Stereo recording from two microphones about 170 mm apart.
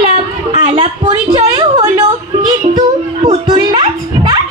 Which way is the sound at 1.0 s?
35° right (ahead or behind).